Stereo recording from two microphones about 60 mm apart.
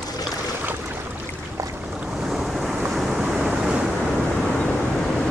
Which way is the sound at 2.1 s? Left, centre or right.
Centre.